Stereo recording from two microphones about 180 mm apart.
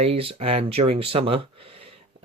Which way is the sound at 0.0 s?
30° right (ahead or behind).